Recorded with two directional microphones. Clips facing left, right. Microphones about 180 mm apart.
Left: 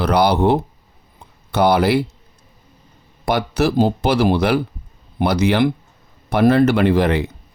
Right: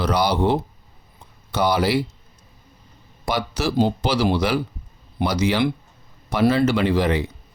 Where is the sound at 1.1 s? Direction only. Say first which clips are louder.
Left 5 dB; 60° left (ahead or behind).